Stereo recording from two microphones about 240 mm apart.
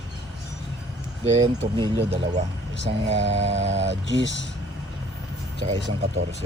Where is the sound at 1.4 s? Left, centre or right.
Right.